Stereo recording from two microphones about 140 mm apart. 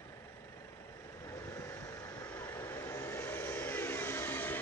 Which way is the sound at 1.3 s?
20° left (ahead or behind).